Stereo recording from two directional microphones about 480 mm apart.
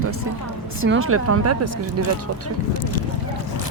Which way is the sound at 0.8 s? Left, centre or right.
Right.